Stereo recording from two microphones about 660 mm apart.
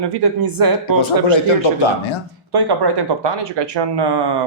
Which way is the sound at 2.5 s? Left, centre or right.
Right.